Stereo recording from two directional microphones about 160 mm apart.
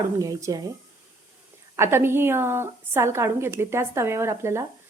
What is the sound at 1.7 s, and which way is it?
A woman's voice, 15° right (ahead or behind).